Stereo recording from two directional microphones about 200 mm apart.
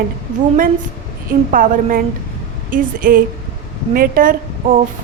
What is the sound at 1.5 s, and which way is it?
A woman's voice, 45° right (ahead or behind).